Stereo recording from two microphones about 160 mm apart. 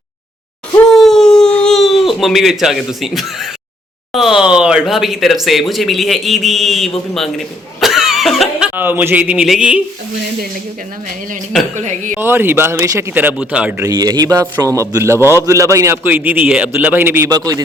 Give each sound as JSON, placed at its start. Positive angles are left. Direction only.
{"t": 0.9, "sound": "a sound", "side_deg": 0}
{"t": 4.1, "sound": "speech", "side_deg": 0}
{"t": 11.8, "sound": "speech", "side_deg": -45}
{"t": 12.2, "sound": "a man's voice", "side_deg": -15}
{"t": 13.8, "sound": "a man's voice", "side_deg": -25}
{"t": 17.2, "sound": "speech", "side_deg": -25}